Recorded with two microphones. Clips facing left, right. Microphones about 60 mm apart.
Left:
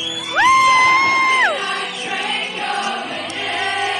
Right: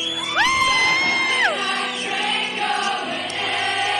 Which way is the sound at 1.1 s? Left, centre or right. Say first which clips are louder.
Left 5 dB; centre.